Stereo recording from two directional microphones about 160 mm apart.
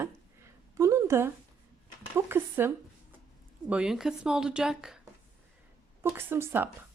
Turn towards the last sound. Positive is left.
turn(degrees=-15)  # may be behind; listen again after turning